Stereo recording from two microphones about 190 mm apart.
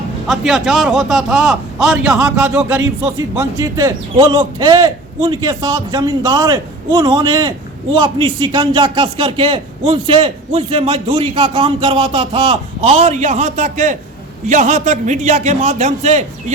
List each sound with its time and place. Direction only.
0.3 s a man's voice: centre (ahead or behind)
2.6 s a man's voice: 15° right (ahead or behind); by 16.2 s 35° right (ahead or behind)